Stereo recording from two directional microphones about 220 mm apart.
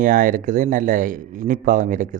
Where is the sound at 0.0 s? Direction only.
35° right (ahead or behind).